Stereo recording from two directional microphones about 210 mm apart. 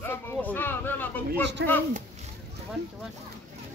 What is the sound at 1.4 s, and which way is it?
Speech, 55° right (ahead or behind).